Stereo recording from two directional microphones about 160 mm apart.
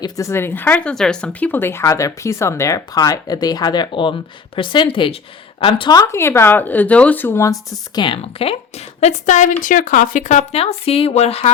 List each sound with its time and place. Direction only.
0.0 s speech: 20° left (ahead or behind); by 11.5 s 40° left (ahead or behind)